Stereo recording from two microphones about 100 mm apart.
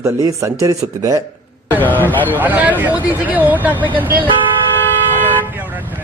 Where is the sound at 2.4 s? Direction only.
15° right (ahead or behind).